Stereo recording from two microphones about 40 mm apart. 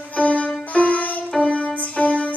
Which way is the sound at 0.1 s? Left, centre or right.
Left.